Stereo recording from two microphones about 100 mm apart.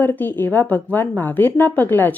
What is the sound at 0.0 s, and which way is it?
A woman's voice, 20° left (ahead or behind).